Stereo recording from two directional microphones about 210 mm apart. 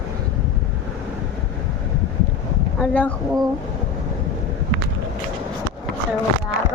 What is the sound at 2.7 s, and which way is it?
Speech, 5° left (ahead or behind).